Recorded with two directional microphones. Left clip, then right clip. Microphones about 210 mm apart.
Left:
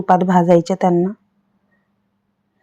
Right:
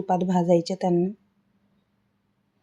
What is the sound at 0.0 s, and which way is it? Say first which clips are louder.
Speech: left 10 dB; 20° left (ahead or behind).